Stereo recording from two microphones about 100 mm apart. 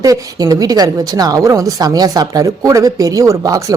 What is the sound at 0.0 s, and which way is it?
Speech, 35° right (ahead or behind).